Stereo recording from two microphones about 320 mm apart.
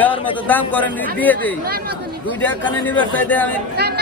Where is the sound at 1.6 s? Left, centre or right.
Right.